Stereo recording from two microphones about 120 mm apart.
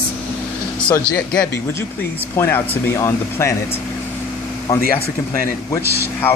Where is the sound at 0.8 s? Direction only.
10° left (ahead or behind).